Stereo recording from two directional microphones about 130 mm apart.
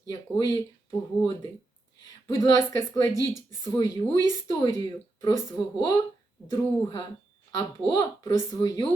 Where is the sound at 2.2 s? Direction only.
30° left (ahead or behind).